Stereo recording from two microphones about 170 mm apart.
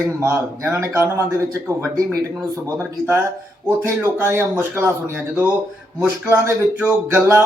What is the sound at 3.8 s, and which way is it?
Speech, 15° right (ahead or behind).